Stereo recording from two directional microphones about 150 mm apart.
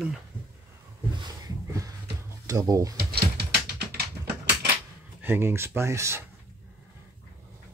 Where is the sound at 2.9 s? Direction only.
90° right.